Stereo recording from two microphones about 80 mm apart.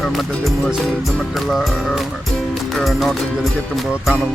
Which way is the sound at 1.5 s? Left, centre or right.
Centre.